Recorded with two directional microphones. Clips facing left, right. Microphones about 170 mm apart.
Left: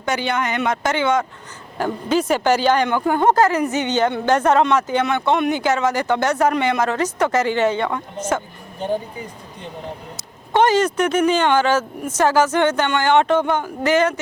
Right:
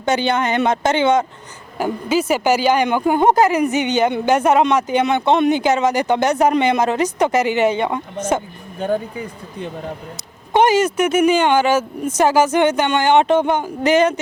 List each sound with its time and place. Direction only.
0.0 s speech: 25° right (ahead or behind)
1.8 s speech: 5° right (ahead or behind)
10.5 s speech: 10° right (ahead or behind)